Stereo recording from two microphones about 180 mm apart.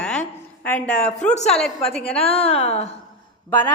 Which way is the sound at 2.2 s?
35° left (ahead or behind).